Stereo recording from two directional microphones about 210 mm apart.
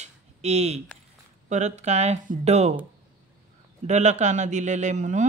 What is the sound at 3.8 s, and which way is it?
Speech, 35° right (ahead or behind).